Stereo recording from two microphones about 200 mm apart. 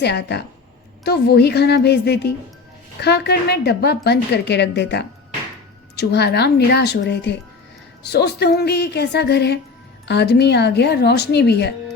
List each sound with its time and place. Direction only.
0.0 s a woman's voice: 55° left (ahead or behind)